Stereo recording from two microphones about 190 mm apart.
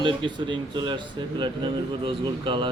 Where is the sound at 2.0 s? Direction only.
25° right (ahead or behind).